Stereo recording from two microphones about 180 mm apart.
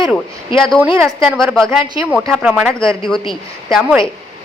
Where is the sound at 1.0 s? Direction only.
20° right (ahead or behind).